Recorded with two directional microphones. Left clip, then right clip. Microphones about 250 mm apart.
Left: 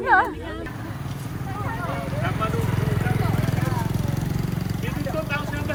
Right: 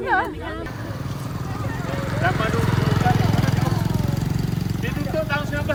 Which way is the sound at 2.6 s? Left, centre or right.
Right.